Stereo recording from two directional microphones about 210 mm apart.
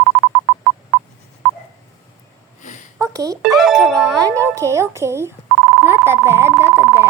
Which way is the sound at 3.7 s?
15° right (ahead or behind).